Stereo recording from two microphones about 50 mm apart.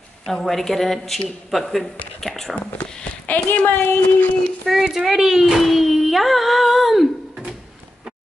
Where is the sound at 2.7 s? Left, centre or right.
Left.